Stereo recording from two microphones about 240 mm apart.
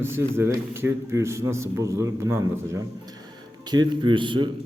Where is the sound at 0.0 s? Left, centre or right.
Centre.